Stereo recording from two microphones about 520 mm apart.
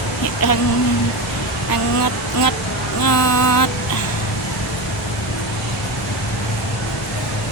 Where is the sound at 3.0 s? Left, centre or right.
Left.